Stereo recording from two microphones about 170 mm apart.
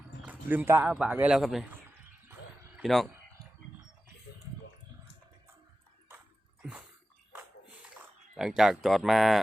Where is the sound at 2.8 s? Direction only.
Centre (ahead or behind).